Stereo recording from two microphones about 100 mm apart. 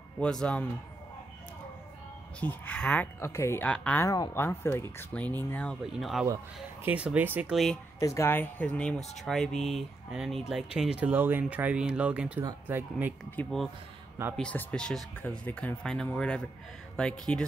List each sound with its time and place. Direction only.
0.2 s speech: 10° left (ahead or behind)
2.4 s speech: 15° left (ahead or behind)
3.2 s speech: 25° left (ahead or behind)
3.6 s speech: 10° left (ahead or behind)
4.0 s speech: 30° left (ahead or behind); by 5.8 s 15° left (ahead or behind)
5.9 s speech: 5° right (ahead or behind)
6.8 s speech: 15° right (ahead or behind)
7.5 s speech: centre (ahead or behind)
8.0 s speech: 35° left (ahead or behind)
8.3 s speech: 20° left (ahead or behind); by 11.1 s 10° right (ahead or behind)
11.1 s speech: 20° right (ahead or behind)
13.4 s speech: 15° left (ahead or behind)